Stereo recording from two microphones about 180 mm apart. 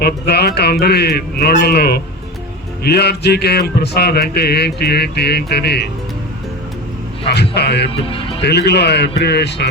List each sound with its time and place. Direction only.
0.0 s a sound: 65° left (ahead or behind)
7.3 s a man's voice: 65° left (ahead or behind)
7.9 s speech: 30° left (ahead or behind)
8.4 s a man's voice: 65° left (ahead or behind)